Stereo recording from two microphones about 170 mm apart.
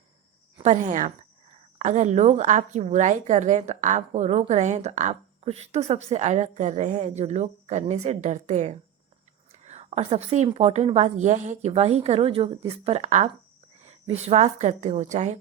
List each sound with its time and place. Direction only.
0.6 s a woman's voice: 45° right (ahead or behind)